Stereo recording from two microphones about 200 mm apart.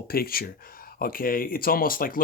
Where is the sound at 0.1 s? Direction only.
50° left (ahead or behind).